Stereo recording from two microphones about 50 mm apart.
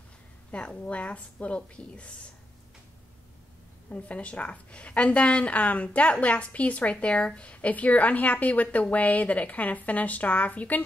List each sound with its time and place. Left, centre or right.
0.5 s a woman's voice: left
3.9 s a woman's voice: left